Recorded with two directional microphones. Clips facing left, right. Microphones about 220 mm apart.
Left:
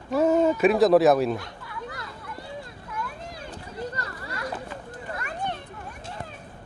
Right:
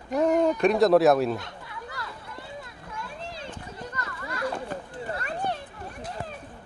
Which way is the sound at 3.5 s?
35° left (ahead or behind).